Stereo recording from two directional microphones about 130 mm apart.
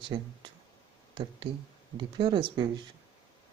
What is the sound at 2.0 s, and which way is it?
Speech, 40° right (ahead or behind).